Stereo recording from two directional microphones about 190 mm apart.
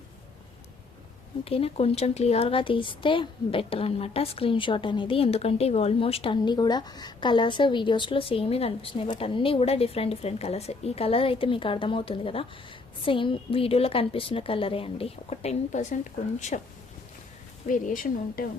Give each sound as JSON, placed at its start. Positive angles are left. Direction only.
{"t": 1.5, "sound": "speech", "side_deg": 30}
{"t": 17.7, "sound": "speech", "side_deg": 45}